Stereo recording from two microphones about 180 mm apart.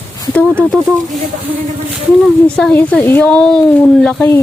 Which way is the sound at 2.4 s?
5° left (ahead or behind).